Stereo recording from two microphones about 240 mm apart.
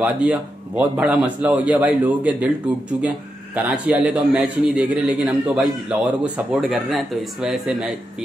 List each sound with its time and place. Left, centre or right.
0.0 s a man's voice: centre
3.5 s a man's voice: centre